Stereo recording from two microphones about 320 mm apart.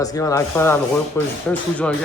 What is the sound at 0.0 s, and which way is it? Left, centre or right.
A man's voice, centre.